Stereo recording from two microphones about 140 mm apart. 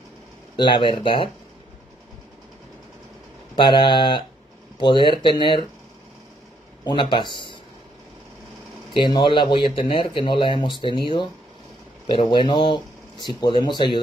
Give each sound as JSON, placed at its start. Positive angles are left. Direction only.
{"t": 0.6, "sound": "speech", "side_deg": 35}
{"t": 3.5, "sound": "speech", "side_deg": 35}
{"t": 6.8, "sound": "speech", "side_deg": 35}
{"t": 8.9, "sound": "speech", "side_deg": 35}